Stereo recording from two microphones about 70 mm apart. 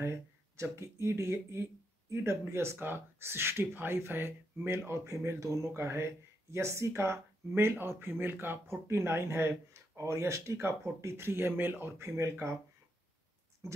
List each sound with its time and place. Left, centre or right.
0.0 s speech: right